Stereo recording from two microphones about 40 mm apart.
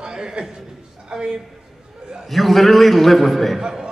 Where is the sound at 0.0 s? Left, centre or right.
Centre.